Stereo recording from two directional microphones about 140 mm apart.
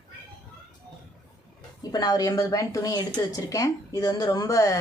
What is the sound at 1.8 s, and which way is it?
A woman's voice, 30° left (ahead or behind).